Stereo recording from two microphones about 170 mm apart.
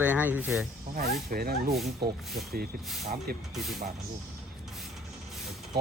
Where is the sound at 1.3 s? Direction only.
65° right (ahead or behind).